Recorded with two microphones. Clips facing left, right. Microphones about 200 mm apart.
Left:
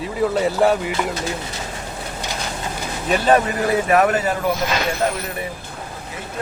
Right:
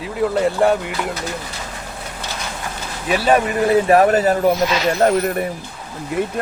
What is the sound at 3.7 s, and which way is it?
A man's voice, 30° right (ahead or behind).